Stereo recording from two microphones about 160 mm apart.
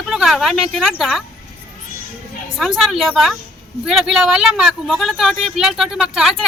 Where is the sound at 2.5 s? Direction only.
Centre (ahead or behind).